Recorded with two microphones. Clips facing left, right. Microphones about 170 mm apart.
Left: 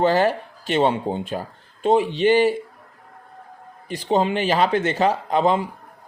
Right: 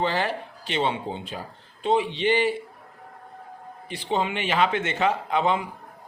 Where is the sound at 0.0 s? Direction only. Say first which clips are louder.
Left 7 dB; 45° left (ahead or behind).